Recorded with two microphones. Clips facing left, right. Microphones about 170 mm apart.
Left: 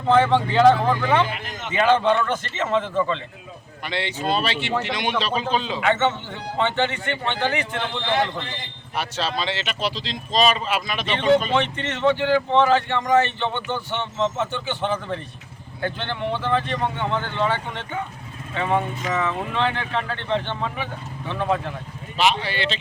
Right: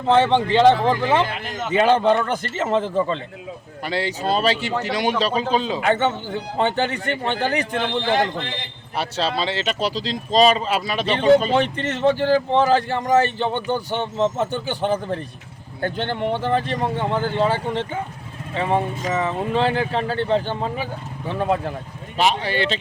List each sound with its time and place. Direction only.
0.1 s speech: 25° right (ahead or behind)
1.6 s speech: 35° right (ahead or behind)
9.0 s speech: 35° right (ahead or behind)